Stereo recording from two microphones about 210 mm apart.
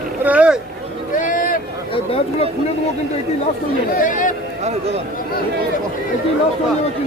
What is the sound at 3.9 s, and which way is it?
Speech, 40° left (ahead or behind).